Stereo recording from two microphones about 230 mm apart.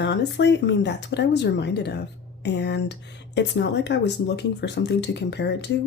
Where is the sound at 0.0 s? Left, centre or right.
Left.